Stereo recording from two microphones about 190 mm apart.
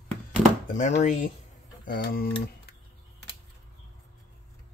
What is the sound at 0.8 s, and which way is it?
Speech, 40° left (ahead or behind).